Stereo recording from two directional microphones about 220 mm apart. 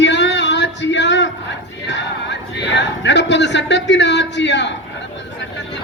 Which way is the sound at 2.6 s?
55° left (ahead or behind).